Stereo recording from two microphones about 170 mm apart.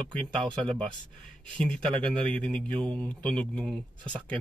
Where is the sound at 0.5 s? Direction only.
5° left (ahead or behind).